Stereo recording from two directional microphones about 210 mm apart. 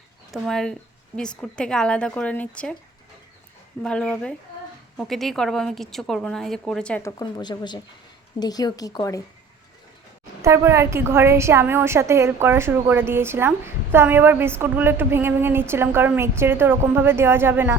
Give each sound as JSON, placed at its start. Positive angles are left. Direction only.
{"t": 0.3, "sound": "a woman's voice", "side_deg": 0}
{"t": 3.8, "sound": "a woman's voice", "side_deg": 5}
{"t": 7.2, "sound": "a woman's voice", "side_deg": 20}
{"t": 10.4, "sound": "a woman's voice", "side_deg": -10}